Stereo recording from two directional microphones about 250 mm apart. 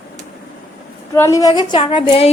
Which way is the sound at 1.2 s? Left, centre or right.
Centre.